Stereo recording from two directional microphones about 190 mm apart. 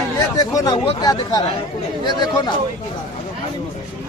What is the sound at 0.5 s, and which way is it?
Speech, 20° left (ahead or behind).